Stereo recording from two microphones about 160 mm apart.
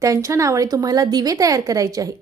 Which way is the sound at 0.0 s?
20° right (ahead or behind).